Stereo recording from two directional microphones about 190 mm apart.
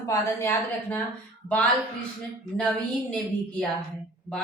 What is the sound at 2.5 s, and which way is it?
Speech, 5° left (ahead or behind).